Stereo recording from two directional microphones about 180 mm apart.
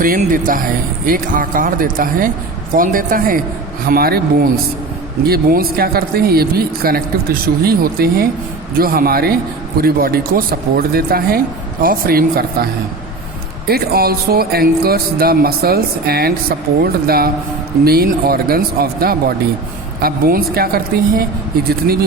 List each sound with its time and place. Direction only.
0.0 s speech: 50° right (ahead or behind)
13.7 s speech: 60° right (ahead or behind)